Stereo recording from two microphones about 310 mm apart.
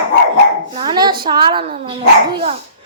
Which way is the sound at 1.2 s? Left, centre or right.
Centre.